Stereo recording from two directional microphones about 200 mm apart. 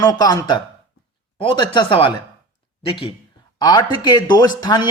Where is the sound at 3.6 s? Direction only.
20° left (ahead or behind).